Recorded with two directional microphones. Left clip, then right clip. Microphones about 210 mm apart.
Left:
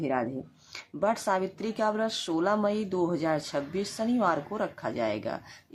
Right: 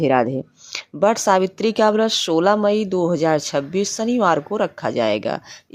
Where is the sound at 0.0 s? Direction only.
40° right (ahead or behind).